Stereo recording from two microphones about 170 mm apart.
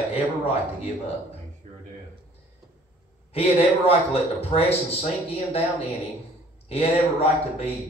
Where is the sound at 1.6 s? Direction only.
40° right (ahead or behind).